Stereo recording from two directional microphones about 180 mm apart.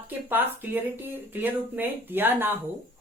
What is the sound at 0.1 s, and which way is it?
Speech, 10° right (ahead or behind).